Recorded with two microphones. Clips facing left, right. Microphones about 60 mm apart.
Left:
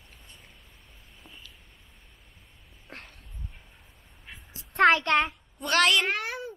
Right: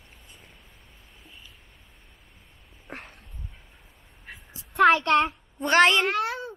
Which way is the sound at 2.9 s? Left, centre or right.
Right.